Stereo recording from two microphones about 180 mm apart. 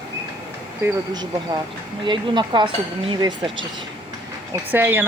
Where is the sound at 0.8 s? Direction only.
20° right (ahead or behind).